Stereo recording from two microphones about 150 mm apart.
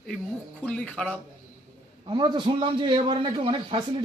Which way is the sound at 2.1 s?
30° right (ahead or behind).